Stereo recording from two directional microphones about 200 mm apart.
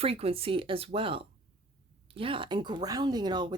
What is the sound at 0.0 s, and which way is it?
Speech, 30° right (ahead or behind).